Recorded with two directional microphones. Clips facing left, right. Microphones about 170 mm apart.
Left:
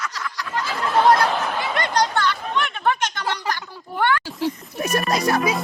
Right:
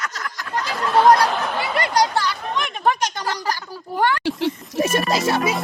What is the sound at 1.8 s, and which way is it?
Speech, 10° right (ahead or behind).